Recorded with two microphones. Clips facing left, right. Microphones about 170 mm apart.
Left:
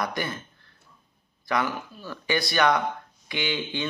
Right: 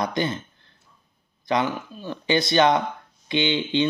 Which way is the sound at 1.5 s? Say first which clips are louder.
Right 3 dB; 20° right (ahead or behind).